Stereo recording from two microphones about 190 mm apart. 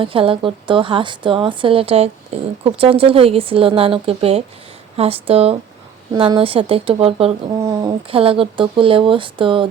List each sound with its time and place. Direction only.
0.0 s speech: 30° right (ahead or behind)